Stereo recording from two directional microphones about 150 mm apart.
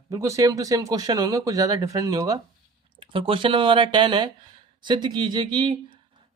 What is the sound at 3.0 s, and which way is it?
Speech, 35° right (ahead or behind).